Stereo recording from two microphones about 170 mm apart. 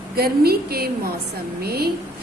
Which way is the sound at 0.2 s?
65° right (ahead or behind).